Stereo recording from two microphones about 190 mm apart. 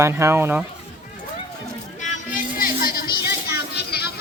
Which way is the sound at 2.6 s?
50° left (ahead or behind).